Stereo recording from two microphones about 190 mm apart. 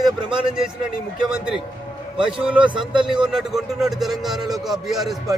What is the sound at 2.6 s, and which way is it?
Speech, 25° right (ahead or behind).